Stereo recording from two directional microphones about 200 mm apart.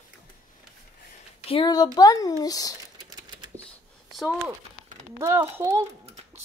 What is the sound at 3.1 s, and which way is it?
Typewriter, 20° right (ahead or behind).